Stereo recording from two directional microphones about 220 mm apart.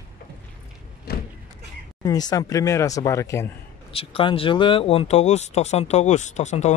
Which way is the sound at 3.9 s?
25° left (ahead or behind).